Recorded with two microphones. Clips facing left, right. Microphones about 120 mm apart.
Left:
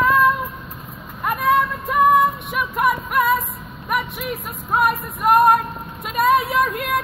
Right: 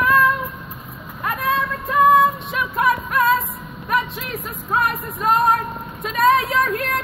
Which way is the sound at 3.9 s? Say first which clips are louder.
Right 1 dB; 15° left (ahead or behind).